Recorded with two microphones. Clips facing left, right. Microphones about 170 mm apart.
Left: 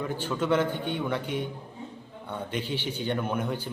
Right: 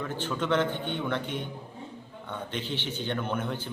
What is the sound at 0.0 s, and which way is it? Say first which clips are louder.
A man's voice: left 2 dB; 10° left (ahead or behind).